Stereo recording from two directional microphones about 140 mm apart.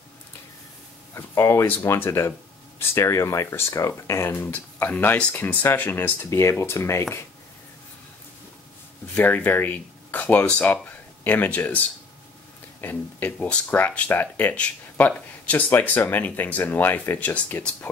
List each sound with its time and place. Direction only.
1.1 s speech: 20° left (ahead or behind)
9.0 s speech: 15° left (ahead or behind)
12.8 s speech: 10° left (ahead or behind)